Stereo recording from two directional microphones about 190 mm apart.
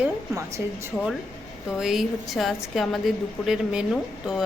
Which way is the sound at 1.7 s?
Centre (ahead or behind).